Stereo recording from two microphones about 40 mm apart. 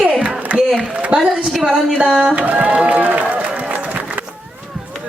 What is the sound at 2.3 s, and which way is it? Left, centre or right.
Speech, right.